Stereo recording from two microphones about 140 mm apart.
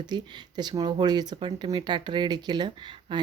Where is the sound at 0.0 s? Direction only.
30° right (ahead or behind).